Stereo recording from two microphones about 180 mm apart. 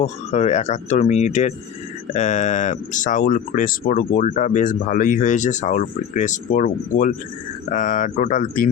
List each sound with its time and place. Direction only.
0.0 s speech: 40° left (ahead or behind)